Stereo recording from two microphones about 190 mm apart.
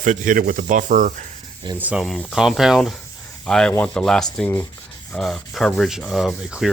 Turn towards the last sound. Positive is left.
turn(degrees=0)  # may be behind; listen again after turning